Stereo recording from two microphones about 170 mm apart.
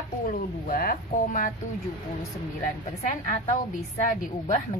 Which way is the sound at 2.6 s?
50° left (ahead or behind).